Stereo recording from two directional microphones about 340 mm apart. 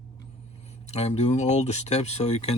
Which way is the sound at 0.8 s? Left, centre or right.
Centre.